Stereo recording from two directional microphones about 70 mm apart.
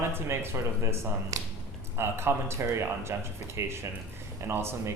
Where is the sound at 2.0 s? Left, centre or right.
Right.